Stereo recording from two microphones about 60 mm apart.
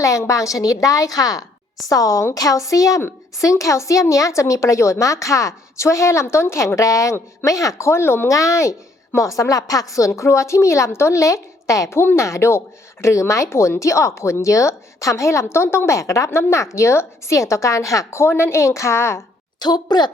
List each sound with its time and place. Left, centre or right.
0.0 s a woman's voice: left
1.9 s a woman's voice: left
8.3 s a woman's voice: left
10.2 s speech: left
11.9 s a woman's voice: left